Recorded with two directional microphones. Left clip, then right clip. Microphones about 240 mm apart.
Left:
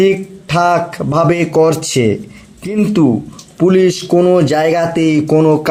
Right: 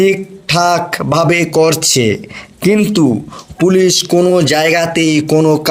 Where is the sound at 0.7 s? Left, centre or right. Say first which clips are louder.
Right 1 dB; right.